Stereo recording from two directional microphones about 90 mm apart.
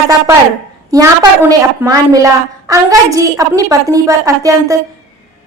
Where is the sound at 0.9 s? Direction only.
40° right (ahead or behind).